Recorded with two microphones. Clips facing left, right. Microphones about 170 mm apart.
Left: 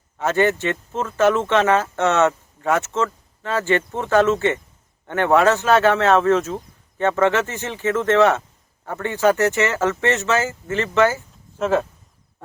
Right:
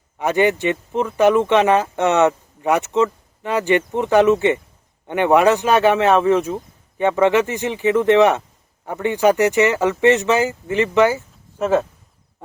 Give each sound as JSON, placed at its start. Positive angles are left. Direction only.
{"t": 0.2, "sound": "speech", "side_deg": -15}